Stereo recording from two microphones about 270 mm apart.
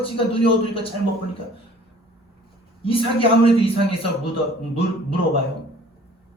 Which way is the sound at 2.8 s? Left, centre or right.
Centre.